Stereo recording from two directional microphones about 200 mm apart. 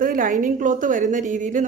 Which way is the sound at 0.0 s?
45° right (ahead or behind).